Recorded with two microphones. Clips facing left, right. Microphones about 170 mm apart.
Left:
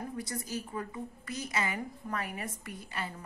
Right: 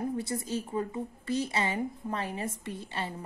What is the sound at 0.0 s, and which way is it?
A woman's voice, 25° right (ahead or behind).